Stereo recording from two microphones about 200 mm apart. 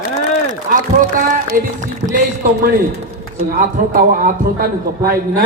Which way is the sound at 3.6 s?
45° right (ahead or behind).